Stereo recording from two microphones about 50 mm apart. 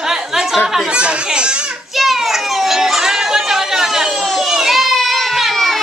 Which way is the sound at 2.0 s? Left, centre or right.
Centre.